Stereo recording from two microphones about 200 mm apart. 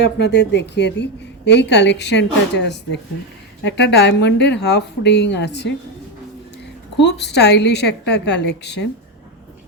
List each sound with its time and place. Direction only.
0.2 s speech: 55° left (ahead or behind)
6.9 s speech: 60° left (ahead or behind)